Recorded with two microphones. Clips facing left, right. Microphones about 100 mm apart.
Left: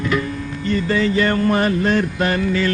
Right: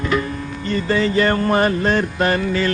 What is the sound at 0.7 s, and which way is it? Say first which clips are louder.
Mantra: even; 35° right (ahead or behind).